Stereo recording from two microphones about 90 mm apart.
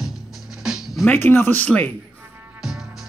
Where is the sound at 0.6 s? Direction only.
5° right (ahead or behind).